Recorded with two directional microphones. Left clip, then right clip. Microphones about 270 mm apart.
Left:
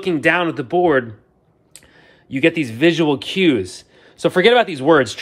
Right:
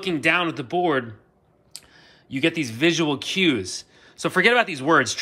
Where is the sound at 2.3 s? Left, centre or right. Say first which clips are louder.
Left 6 dB; centre.